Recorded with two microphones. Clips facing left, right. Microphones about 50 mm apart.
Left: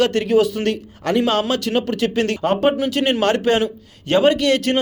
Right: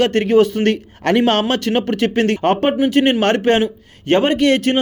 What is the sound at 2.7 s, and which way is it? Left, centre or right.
Speech, right.